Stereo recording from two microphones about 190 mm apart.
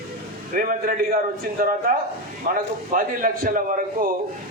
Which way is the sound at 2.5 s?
45° right (ahead or behind).